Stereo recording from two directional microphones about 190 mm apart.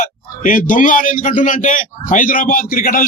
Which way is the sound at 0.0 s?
45° left (ahead or behind).